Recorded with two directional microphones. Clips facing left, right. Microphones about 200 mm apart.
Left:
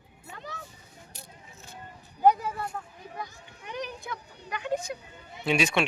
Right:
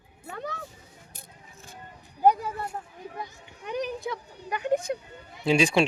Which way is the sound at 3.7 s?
35° right (ahead or behind).